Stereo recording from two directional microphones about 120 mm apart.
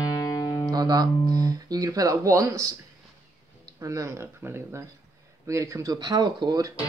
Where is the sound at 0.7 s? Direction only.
35° right (ahead or behind).